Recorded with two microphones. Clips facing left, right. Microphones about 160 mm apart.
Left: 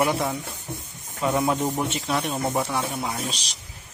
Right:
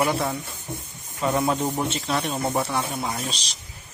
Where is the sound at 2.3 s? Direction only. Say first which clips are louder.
Even; centre (ahead or behind).